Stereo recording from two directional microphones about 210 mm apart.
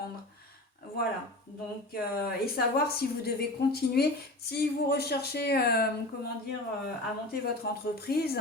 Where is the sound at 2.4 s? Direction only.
50° left (ahead or behind).